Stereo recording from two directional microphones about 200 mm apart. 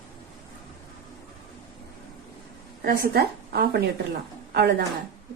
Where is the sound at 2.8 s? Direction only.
50° right (ahead or behind).